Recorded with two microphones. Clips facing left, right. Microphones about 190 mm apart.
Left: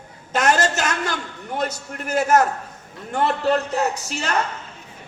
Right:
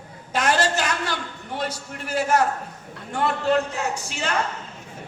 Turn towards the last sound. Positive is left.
turn(degrees=40)  # may be behind; listen again after turning